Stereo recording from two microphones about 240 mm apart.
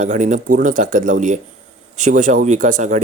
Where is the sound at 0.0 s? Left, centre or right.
Right.